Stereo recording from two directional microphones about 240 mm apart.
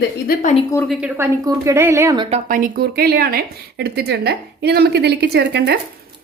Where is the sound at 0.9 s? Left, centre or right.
Centre.